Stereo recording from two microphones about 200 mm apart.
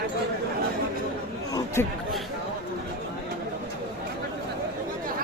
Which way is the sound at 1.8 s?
10° left (ahead or behind).